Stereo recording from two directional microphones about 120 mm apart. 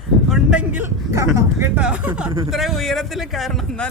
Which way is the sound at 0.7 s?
20° right (ahead or behind).